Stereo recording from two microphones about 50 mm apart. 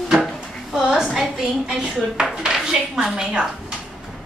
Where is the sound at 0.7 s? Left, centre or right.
Centre.